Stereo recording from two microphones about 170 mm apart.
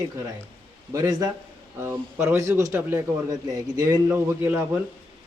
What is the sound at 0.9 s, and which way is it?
A man's voice, 20° right (ahead or behind).